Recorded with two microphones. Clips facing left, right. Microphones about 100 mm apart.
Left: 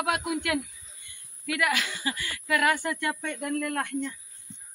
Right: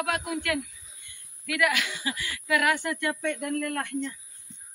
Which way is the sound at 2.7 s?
10° left (ahead or behind).